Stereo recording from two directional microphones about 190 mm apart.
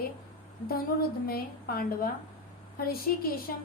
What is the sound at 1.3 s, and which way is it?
A woman's voice, 50° left (ahead or behind).